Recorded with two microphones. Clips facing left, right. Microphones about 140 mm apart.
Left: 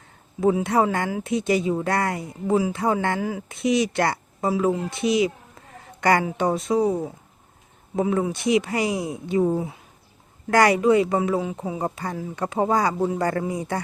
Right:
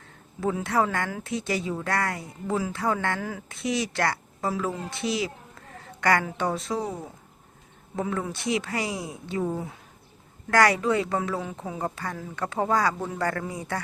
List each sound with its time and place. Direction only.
0.3 s speech: 20° left (ahead or behind)